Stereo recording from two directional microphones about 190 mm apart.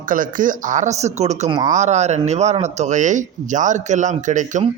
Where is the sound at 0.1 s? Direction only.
45° right (ahead or behind).